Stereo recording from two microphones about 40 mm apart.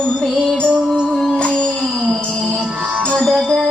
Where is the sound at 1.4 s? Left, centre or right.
Left.